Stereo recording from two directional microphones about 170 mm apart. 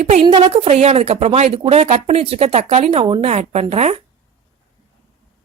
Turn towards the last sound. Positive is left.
turn(degrees=-40)  # may be behind; listen again after turning